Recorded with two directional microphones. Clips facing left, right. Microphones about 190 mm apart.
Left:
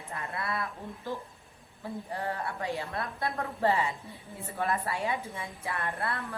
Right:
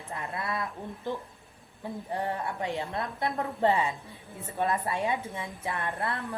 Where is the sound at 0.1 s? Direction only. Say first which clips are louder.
Right 1 dB; 20° right (ahead or behind).